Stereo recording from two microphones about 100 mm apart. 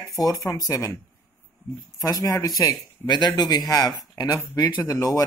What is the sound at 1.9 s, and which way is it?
Speech, 40° left (ahead or behind).